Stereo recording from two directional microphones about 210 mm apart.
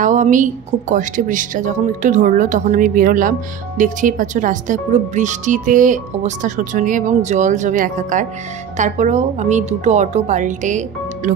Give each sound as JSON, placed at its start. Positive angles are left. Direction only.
{"t": 0.0, "sound": "a woman's voice", "side_deg": -35}